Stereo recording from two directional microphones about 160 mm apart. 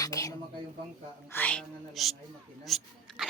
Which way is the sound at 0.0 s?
20° left (ahead or behind).